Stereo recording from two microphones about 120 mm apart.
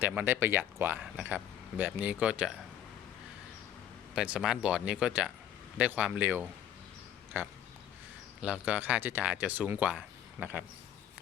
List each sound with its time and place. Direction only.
0.0 s speech: 15° right (ahead or behind)
4.1 s speech: 5° right (ahead or behind)